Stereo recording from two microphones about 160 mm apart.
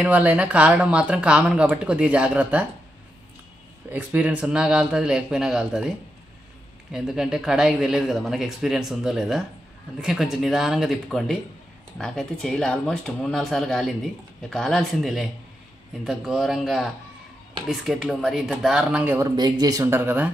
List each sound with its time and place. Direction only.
0.0 s speech: 10° right (ahead or behind)
3.9 s speech: 10° right (ahead or behind)
19.1 s speech: 25° right (ahead or behind)